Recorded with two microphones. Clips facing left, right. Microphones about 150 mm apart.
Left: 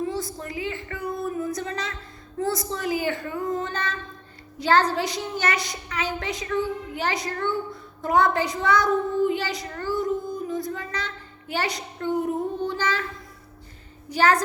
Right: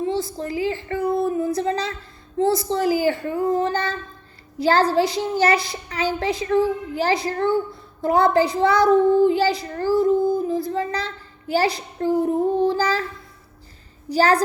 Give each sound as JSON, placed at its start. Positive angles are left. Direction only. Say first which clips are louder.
{"t": 0.0, "sound": "a child's voice", "louder": "right 5 dB", "side_deg": -25}
{"t": 14.1, "sound": "a child's voice", "louder": "right 3 dB", "side_deg": -35}